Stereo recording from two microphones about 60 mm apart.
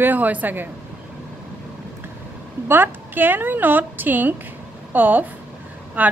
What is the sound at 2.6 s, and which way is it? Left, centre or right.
A woman's voice, right.